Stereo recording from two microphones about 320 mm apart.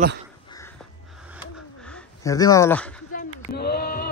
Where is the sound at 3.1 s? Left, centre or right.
Left.